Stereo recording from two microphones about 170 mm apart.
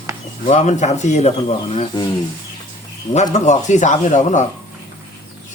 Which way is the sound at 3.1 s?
45° left (ahead or behind).